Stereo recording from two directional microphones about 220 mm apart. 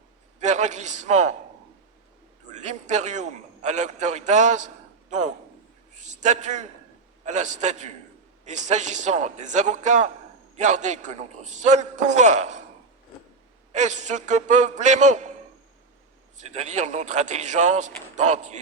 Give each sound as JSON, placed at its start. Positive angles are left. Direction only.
{"t": 0.3, "sound": "speech", "side_deg": -35}
{"t": 2.5, "sound": "a man's voice", "side_deg": -30}
{"t": 13.7, "sound": "speech", "side_deg": -35}
{"t": 16.4, "sound": "speech", "side_deg": -30}